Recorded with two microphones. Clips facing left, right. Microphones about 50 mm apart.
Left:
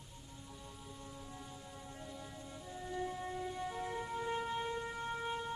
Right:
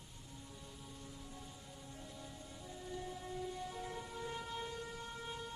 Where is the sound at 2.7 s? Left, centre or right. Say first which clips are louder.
Left 6 dB; centre.